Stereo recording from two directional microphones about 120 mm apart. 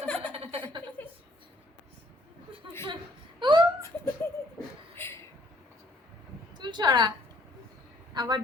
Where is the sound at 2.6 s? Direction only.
40° right (ahead or behind).